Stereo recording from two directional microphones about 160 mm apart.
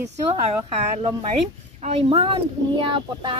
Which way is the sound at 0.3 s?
45° right (ahead or behind).